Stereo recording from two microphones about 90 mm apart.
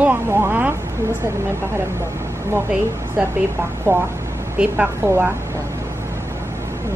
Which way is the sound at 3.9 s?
25° right (ahead or behind).